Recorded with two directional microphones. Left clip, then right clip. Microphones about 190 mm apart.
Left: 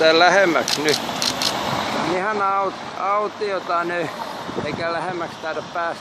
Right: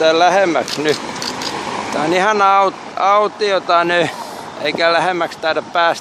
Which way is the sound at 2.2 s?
50° right (ahead or behind).